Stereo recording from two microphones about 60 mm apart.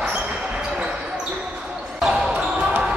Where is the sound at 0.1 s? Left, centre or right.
Centre.